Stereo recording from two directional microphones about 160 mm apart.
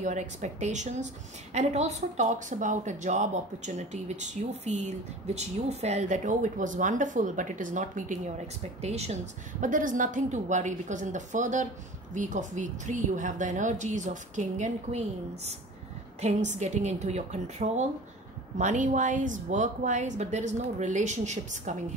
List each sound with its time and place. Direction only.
0.0 s speech: 50° right (ahead or behind)